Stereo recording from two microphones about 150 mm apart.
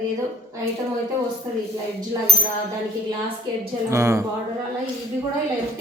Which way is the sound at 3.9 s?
20° right (ahead or behind).